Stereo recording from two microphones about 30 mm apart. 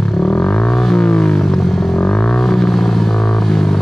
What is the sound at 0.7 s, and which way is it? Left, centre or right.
Vehicle, centre.